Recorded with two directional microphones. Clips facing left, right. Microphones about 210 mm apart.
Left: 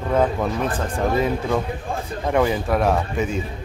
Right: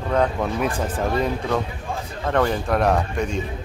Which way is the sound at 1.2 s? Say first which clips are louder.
Left 1 dB; 5° left (ahead or behind).